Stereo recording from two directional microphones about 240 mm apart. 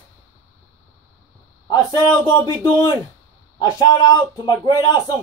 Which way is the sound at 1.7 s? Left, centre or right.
Centre.